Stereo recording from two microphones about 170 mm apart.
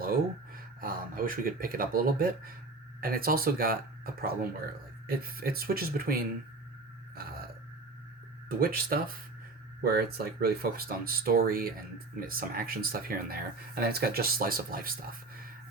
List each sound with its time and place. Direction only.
0.0 s speech: 60° right (ahead or behind)
8.4 s speech: 60° right (ahead or behind)